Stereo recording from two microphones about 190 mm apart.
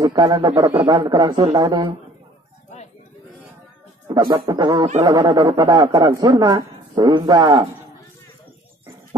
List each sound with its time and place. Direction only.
0.0 s speech: 20° right (ahead or behind)
4.1 s speech: 20° right (ahead or behind)